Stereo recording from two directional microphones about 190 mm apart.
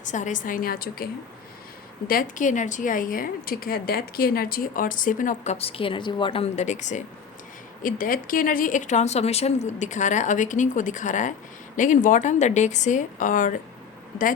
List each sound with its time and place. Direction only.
0.0 s a woman's voice: 40° left (ahead or behind)
2.0 s a woman's voice: 45° left (ahead or behind)